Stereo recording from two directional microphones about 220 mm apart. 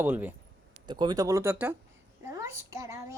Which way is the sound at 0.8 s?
20° right (ahead or behind).